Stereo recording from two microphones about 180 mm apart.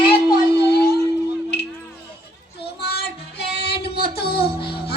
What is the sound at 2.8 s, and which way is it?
Child singing, 60° left (ahead or behind).